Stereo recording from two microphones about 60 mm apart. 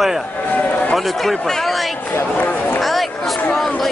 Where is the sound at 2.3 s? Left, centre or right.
Left.